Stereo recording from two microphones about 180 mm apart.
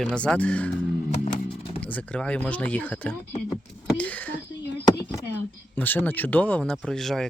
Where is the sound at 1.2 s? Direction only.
30° left (ahead or behind).